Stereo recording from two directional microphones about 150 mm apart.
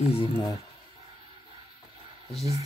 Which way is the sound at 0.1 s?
35° left (ahead or behind).